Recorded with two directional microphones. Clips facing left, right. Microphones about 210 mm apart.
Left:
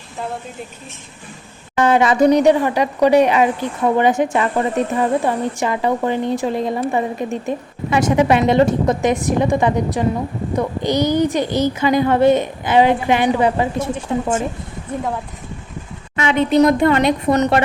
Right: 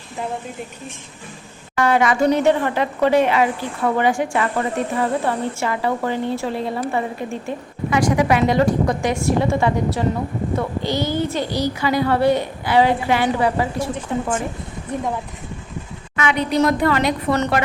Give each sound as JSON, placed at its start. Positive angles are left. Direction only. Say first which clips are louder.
{"t": 1.7, "sound": "speech", "louder": "left 3 dB", "side_deg": 20}
{"t": 16.1, "sound": "speech", "louder": "left 5 dB", "side_deg": 25}